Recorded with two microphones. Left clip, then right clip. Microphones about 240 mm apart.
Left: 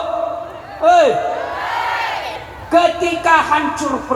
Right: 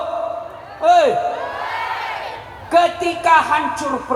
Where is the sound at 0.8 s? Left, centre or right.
Right.